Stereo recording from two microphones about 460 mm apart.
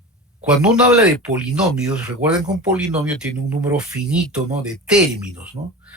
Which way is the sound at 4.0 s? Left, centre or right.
Right.